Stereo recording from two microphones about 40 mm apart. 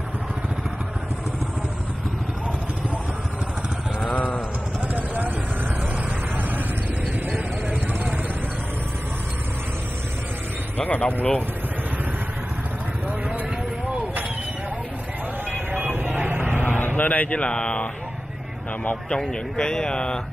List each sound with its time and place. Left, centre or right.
4.9 s vehicle: right
10.8 s speech: left
15.5 s vehicle: right
16.6 s a sound: left
17.3 s speech: left
19.0 s speech: left